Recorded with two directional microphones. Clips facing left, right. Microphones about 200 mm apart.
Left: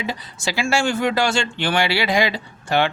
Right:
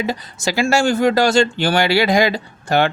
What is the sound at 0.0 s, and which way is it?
Speech, 45° right (ahead or behind).